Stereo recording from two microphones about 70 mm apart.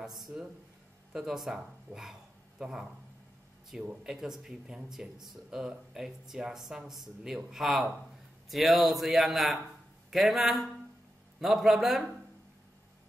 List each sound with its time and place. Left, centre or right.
1.1 s speech: centre
4.0 s speech: centre